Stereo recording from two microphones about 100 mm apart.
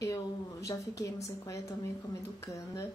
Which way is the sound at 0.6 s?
35° left (ahead or behind).